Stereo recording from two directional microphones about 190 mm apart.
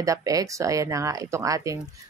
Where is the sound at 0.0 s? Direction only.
20° right (ahead or behind).